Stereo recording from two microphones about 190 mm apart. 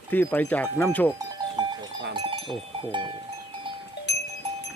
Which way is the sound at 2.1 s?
25° right (ahead or behind).